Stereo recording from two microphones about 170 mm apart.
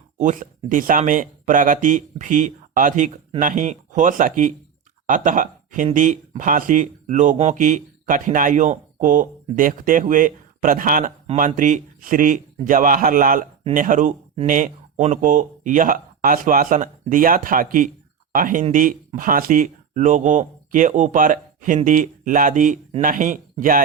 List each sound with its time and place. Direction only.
0.2 s speech: 50° right (ahead or behind)